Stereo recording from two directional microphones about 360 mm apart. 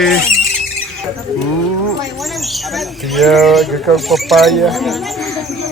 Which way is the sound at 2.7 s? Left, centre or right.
Centre.